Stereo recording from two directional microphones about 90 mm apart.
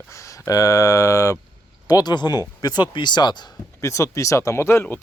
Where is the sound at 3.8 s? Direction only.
35° left (ahead or behind).